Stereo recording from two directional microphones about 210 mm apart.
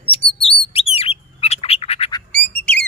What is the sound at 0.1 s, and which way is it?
Bird, 25° left (ahead or behind).